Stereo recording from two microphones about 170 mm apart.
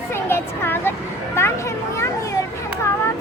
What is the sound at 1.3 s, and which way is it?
Children playing, 15° left (ahead or behind).